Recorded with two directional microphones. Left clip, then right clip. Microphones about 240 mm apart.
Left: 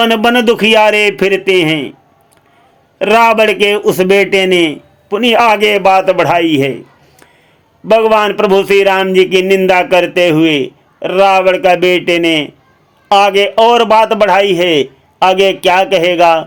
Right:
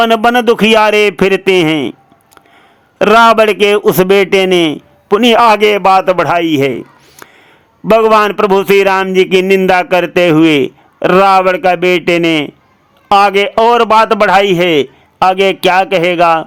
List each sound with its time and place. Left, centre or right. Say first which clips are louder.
0.0 s a man's voice: right 1 dB; right
3.0 s a man's voice: right 2 dB; centre